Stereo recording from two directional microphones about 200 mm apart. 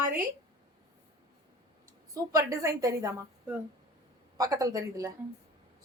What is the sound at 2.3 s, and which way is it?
A woman's voice, 15° right (ahead or behind).